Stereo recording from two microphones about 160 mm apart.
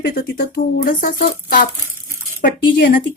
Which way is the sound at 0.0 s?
65° left (ahead or behind).